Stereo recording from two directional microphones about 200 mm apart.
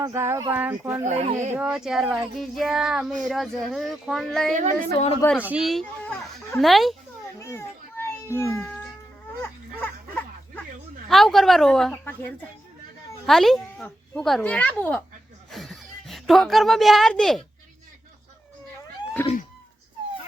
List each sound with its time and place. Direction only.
0.0 s speech: 15° right (ahead or behind)
1.0 s a child's voice: 35° right (ahead or behind)
1.5 s speech: 5° right (ahead or behind)
7.3 s children playing: 15° left (ahead or behind)
8.0 s a sound: 15° left (ahead or behind)
11.1 s speech: centre (ahead or behind)
15.4 s music: centre (ahead or behind)
19.2 s speech: 10° left (ahead or behind)